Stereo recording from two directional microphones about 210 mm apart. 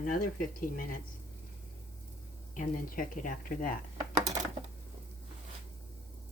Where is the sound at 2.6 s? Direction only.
40° left (ahead or behind).